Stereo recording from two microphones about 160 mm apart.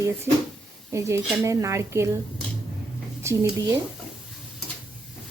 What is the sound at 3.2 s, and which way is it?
Speech, 20° right (ahead or behind).